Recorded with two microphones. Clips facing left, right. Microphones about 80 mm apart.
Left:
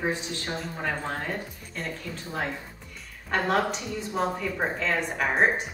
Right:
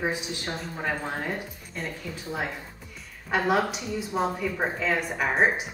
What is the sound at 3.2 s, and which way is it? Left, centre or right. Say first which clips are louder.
Speech: right 1 dB; centre.